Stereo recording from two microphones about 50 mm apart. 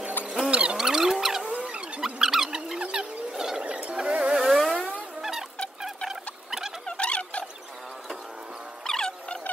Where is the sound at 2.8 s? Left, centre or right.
Right.